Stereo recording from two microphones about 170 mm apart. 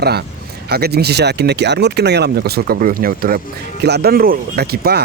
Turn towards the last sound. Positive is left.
turn(degrees=-70)  # may be behind; listen again after turning